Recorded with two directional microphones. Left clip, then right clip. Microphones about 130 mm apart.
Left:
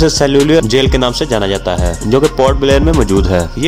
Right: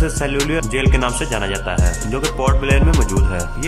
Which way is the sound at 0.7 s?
45° left (ahead or behind).